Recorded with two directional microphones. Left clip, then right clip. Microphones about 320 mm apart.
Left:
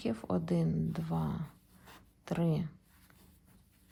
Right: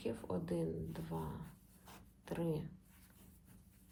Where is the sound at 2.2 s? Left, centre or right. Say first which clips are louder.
Left 5 dB; left.